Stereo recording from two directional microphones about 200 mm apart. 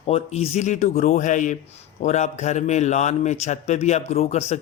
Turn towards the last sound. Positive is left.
turn(degrees=35)  # may be behind; listen again after turning